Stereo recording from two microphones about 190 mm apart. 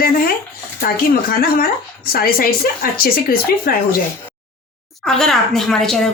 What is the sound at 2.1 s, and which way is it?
Speech, 50° left (ahead or behind).